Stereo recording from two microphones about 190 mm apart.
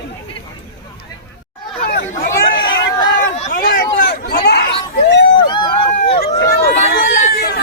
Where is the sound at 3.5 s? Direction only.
50° left (ahead or behind); by 5.3 s 65° left (ahead or behind).